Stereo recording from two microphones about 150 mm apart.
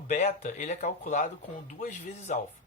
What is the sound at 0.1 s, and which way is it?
Speech, 50° left (ahead or behind).